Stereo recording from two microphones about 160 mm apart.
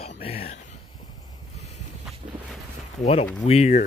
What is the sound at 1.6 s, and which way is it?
Vehicle, 45° left (ahead or behind).